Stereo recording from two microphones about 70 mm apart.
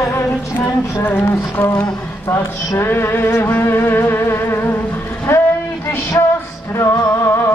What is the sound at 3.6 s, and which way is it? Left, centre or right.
Music, left.